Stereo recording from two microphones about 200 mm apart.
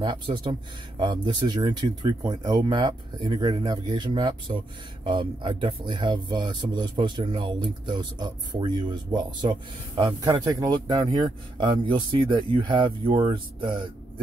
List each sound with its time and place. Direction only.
0.0 s speech: 20° right (ahead or behind)